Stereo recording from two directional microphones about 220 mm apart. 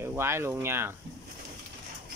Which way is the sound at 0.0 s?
10° right (ahead or behind).